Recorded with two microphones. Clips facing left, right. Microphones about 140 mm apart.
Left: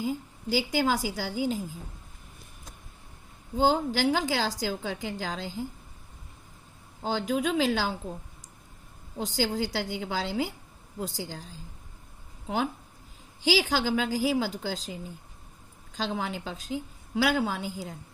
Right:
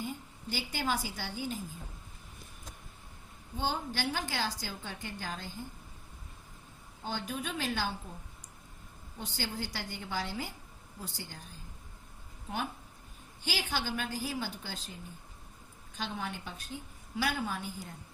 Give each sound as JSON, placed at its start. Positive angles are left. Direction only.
{"t": 0.0, "sound": "a woman's voice", "side_deg": 90}
{"t": 3.6, "sound": "a woman's voice", "side_deg": 90}
{"t": 7.0, "sound": "a woman's voice", "side_deg": 90}
{"t": 9.1, "sound": "a woman's voice", "side_deg": 90}
{"t": 13.4, "sound": "a woman's voice", "side_deg": 90}